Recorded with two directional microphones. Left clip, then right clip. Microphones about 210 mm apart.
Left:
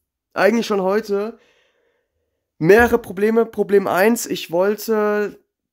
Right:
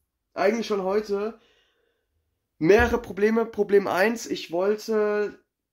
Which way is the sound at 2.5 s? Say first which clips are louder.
Left 6 dB; 45° left (ahead or behind).